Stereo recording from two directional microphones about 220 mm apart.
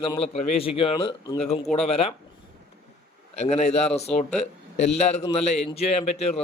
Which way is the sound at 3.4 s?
30° left (ahead or behind).